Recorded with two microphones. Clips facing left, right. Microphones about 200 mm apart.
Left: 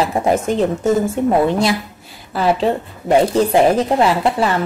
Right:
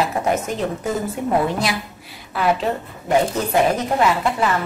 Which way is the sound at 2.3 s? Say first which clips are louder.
Left 4 dB; 30° left (ahead or behind).